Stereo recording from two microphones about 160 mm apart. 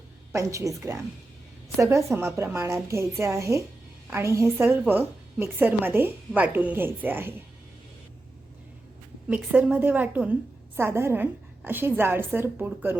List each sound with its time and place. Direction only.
0.3 s a woman's voice: 20° right (ahead or behind)
9.3 s a woman's voice: 5° right (ahead or behind)